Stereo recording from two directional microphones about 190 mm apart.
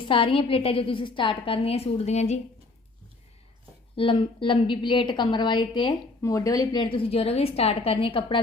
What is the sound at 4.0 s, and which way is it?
A woman's voice, 30° left (ahead or behind).